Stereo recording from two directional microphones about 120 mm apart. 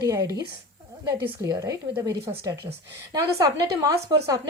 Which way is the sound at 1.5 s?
25° right (ahead or behind).